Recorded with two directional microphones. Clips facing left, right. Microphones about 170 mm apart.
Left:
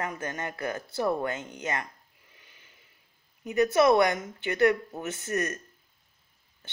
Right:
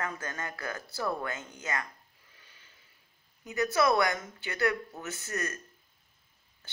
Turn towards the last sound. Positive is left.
turn(degrees=30)  # may be behind; listen again after turning